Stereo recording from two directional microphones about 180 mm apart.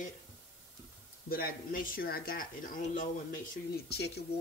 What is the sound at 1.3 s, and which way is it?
Speech, 50° left (ahead or behind).